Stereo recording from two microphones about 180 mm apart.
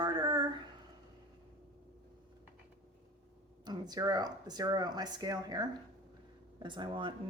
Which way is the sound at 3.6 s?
20° right (ahead or behind).